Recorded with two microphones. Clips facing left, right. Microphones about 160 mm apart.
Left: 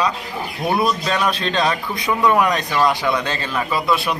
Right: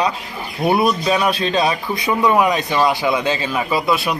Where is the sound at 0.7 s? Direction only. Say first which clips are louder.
Right 3 dB; 10° right (ahead or behind).